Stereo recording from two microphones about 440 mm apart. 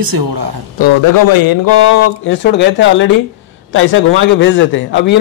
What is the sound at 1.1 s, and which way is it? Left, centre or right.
Speech, left.